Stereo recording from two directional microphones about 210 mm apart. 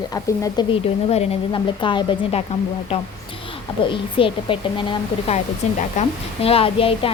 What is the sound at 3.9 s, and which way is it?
A woman's voice, 25° left (ahead or behind).